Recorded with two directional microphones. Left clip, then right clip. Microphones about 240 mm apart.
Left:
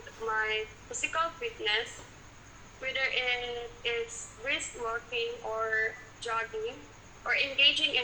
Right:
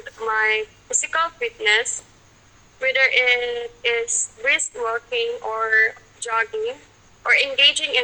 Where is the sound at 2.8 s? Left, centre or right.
Right.